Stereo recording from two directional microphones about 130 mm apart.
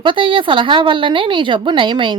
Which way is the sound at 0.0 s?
40° right (ahead or behind).